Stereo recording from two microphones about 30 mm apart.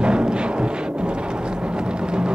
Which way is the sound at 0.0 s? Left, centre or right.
Right.